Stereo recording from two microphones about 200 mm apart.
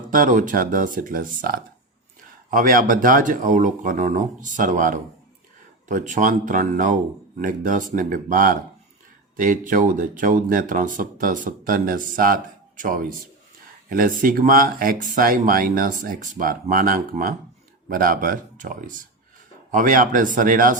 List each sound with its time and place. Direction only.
0.1 s speech: 40° right (ahead or behind)